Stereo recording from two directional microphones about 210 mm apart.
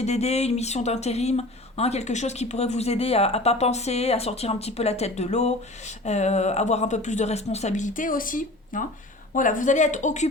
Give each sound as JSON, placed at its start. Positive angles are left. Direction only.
{"t": 0.0, "sound": "speech", "side_deg": 30}